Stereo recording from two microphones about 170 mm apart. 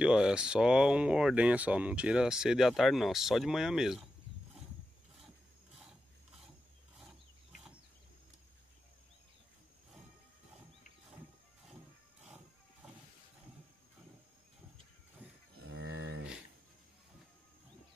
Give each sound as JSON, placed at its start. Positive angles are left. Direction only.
{"t": 0.0, "sound": "speech", "side_deg": -5}
{"t": 15.2, "sound": "livestock", "side_deg": -10}
{"t": 15.8, "sound": "cattle", "side_deg": -90}